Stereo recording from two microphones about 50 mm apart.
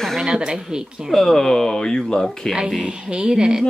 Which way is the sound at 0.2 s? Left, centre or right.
Centre.